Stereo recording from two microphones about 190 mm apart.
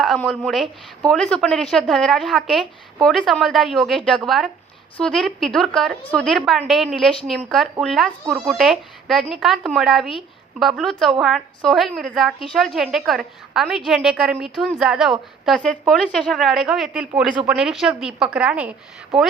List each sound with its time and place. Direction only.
0.2 s a woman's voice: centre (ahead or behind)